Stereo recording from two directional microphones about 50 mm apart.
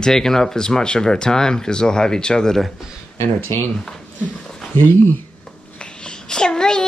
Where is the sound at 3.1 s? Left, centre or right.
Left.